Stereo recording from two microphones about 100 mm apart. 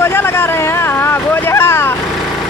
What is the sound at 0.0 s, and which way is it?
Vehicle, 25° left (ahead or behind).